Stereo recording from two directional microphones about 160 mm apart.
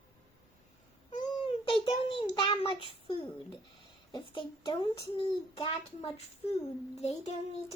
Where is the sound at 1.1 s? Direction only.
35° left (ahead or behind).